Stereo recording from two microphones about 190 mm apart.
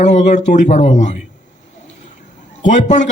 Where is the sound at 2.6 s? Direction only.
40° left (ahead or behind).